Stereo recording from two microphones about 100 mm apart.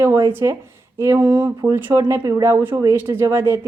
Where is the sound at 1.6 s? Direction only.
30° right (ahead or behind).